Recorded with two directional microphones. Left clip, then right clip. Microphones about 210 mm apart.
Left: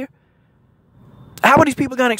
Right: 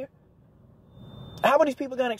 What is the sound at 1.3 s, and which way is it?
Speech, 35° left (ahead or behind).